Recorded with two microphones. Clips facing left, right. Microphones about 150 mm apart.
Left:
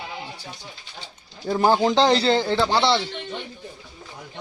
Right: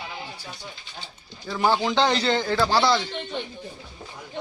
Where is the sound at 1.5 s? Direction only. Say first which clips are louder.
Left 4 dB; 40° left (ahead or behind).